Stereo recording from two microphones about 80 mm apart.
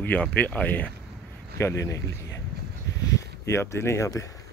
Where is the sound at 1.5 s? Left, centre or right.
Left.